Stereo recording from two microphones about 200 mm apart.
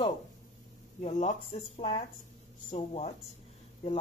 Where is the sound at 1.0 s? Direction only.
35° left (ahead or behind).